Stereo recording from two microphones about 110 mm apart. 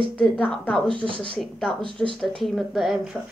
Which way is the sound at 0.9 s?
50° right (ahead or behind).